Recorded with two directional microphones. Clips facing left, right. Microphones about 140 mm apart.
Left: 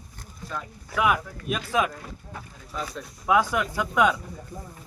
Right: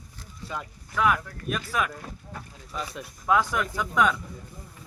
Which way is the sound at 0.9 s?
15° left (ahead or behind).